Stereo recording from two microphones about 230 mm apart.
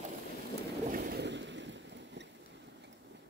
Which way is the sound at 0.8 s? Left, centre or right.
Right.